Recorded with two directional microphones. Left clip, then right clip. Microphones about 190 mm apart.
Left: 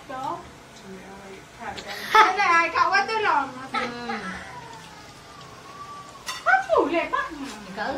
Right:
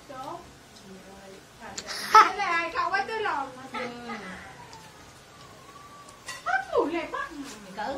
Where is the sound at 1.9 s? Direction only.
45° right (ahead or behind).